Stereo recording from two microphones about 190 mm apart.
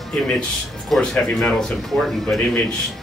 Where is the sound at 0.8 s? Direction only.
Centre (ahead or behind).